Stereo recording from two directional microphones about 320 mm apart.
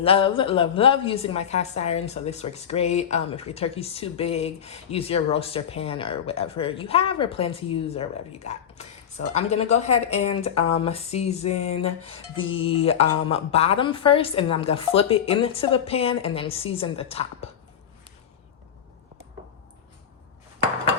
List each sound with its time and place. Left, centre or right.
0.0 s a woman's voice: centre
12.1 s music: left
12.5 s a woman's voice: centre